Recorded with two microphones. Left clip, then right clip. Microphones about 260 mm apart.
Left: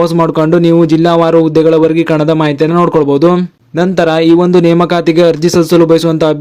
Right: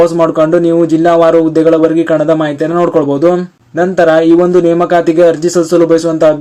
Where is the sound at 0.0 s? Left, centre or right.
Left.